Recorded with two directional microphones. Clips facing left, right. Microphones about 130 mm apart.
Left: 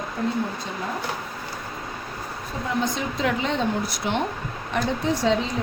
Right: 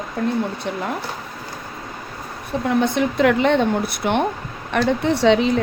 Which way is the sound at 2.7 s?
65° right (ahead or behind).